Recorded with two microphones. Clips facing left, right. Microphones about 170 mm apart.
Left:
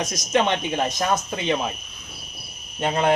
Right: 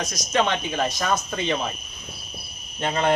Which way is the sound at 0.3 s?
20° left (ahead or behind).